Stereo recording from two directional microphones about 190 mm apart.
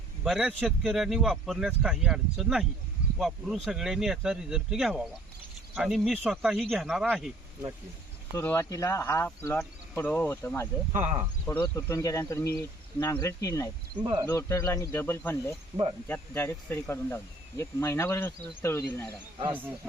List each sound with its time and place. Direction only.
0.3 s speech: 5° right (ahead or behind)
8.4 s speech: 15° left (ahead or behind)
14.0 s speech: 25° right (ahead or behind)
14.3 s speech: 15° left (ahead or behind)
15.7 s speech: 20° right (ahead or behind)
16.0 s speech: 10° left (ahead or behind)
19.5 s speech: 10° right (ahead or behind)